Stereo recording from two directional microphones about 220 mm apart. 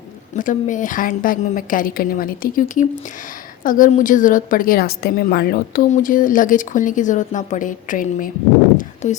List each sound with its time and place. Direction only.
0.3 s a woman's voice: 35° left (ahead or behind)